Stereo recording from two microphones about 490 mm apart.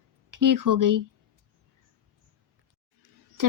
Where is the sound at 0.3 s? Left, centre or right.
Right.